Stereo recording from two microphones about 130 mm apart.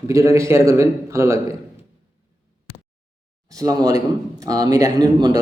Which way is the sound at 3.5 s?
30° right (ahead or behind).